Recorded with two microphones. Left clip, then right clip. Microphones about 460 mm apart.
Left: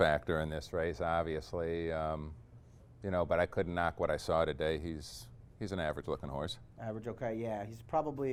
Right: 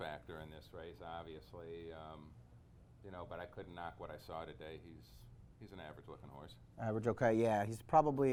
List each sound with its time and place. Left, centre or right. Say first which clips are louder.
0.0 s speech: left 17 dB; left
6.7 s speech: right 6 dB; right